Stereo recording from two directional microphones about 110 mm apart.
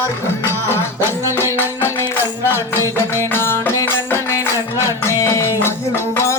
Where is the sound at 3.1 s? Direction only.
20° left (ahead or behind).